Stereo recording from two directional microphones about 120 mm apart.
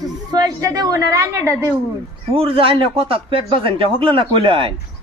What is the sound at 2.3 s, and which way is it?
Speech, 50° right (ahead or behind).